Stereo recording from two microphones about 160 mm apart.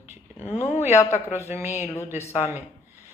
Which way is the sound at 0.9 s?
15° left (ahead or behind).